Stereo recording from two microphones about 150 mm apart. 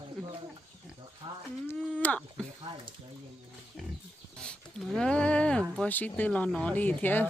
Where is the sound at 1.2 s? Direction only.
30° right (ahead or behind).